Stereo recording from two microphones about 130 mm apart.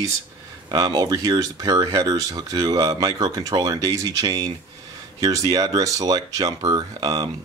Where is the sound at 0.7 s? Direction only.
30° right (ahead or behind).